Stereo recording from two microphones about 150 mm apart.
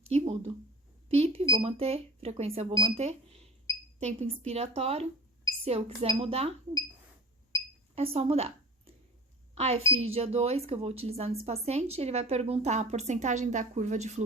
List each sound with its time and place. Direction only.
0.1 s a sound: 45° right (ahead or behind)
2.4 s speech: 40° right (ahead or behind)
7.9 s speech: 40° right (ahead or behind)